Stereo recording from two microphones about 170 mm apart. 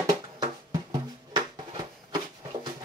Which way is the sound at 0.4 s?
25° right (ahead or behind).